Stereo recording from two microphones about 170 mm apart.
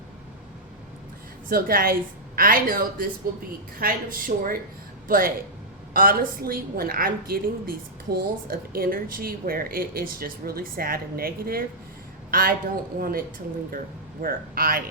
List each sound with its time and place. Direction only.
1.5 s speech: 60° right (ahead or behind)